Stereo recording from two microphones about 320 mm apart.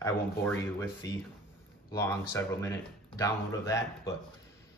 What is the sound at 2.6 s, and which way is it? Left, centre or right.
Speech, centre.